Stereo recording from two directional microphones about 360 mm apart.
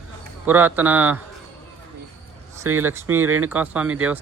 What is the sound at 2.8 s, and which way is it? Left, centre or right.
A man's voice, centre.